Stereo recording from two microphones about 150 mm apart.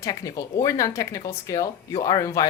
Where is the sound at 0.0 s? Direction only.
25° left (ahead or behind).